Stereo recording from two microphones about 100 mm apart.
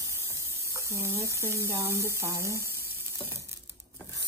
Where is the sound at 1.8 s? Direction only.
25° right (ahead or behind).